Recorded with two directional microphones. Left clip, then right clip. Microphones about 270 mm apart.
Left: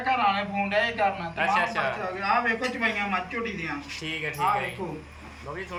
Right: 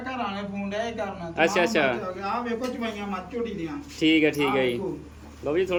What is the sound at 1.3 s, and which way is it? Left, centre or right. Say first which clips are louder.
Speech: right 2 dB; right.